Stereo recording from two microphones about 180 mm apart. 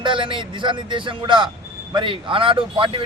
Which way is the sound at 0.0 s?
25° right (ahead or behind).